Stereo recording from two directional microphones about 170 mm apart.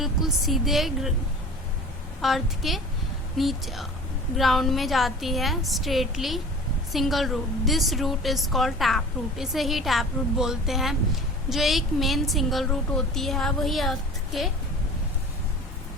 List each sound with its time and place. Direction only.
0.0 s a woman's voice: centre (ahead or behind)
2.2 s a woman's voice: centre (ahead or behind)